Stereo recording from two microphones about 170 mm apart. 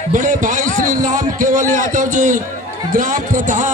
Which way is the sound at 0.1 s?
50° right (ahead or behind).